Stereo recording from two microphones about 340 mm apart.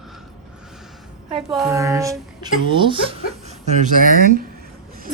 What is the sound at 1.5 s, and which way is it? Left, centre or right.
Speech, centre.